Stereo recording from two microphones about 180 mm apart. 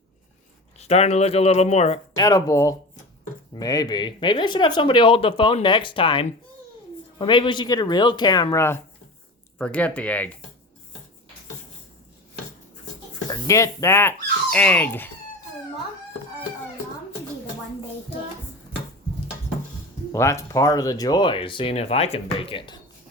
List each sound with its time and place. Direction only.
0.8 s speech: 35° left (ahead or behind)
2.1 s speech: 20° left (ahead or behind)
13.3 s speech: 15° left (ahead or behind)
20.1 s speech: 15° left (ahead or behind)